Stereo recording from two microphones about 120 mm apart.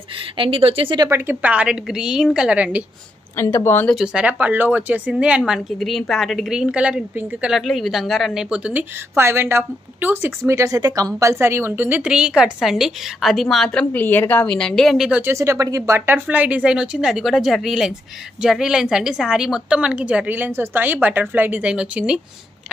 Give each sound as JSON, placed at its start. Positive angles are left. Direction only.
{"t": 0.2, "sound": "speech", "side_deg": -50}
{"t": 1.1, "sound": "a woman's voice", "side_deg": -15}
{"t": 3.3, "sound": "speech", "side_deg": 20}
{"t": 3.9, "sound": "a woman's voice", "side_deg": -5}
{"t": 7.5, "sound": "a woman's voice", "side_deg": 0}
{"t": 9.1, "sound": "a woman's voice", "side_deg": -20}
{"t": 15.0, "sound": "a woman's voice", "side_deg": -15}
{"t": 15.3, "sound": "a woman's voice", "side_deg": -25}